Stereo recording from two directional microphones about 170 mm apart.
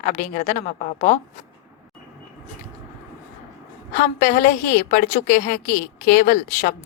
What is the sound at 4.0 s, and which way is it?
A woman's voice, 55° left (ahead or behind).